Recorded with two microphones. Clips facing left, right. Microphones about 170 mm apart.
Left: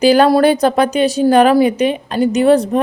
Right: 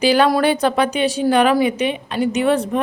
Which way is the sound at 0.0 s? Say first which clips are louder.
Left 5 dB; 45° left (ahead or behind).